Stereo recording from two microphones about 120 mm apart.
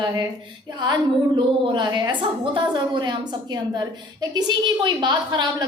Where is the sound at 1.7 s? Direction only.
40° right (ahead or behind).